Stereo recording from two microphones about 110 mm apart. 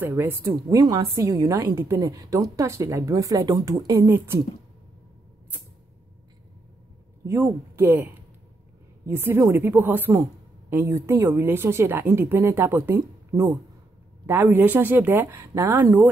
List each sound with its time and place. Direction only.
0.0 s speech: 20° right (ahead or behind)
0.7 s speech: 35° right (ahead or behind)
7.2 s speech: 25° right (ahead or behind)
9.0 s speech: 25° right (ahead or behind)
12.9 s speech: 35° right (ahead or behind)
14.2 s speech: 20° right (ahead or behind)